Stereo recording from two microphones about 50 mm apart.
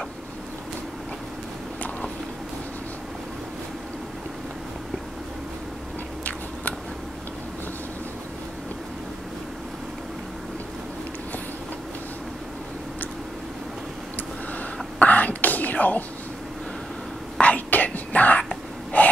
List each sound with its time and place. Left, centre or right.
15.0 s whispering: left
17.4 s whispering: left
18.4 s whispering: centre